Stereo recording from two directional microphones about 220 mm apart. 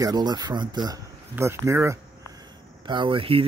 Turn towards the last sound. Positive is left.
turn(degrees=-25)  # may be behind; listen again after turning